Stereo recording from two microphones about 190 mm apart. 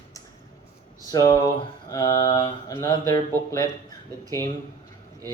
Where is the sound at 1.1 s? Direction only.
20° left (ahead or behind).